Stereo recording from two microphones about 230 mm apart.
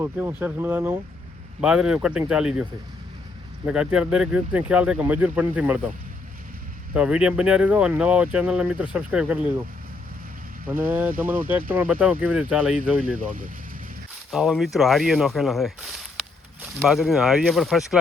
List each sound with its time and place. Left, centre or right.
0.0 s speech: centre
3.7 s speech: centre
6.9 s speech: centre
10.7 s speech: centre
11.0 s speech: right
11.7 s speech: centre
14.3 s speech: centre